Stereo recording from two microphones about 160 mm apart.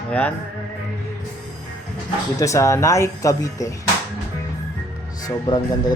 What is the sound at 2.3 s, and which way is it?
Speech, 20° left (ahead or behind).